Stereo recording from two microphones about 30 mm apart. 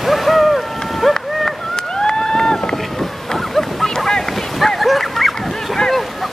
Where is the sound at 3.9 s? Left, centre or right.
Left.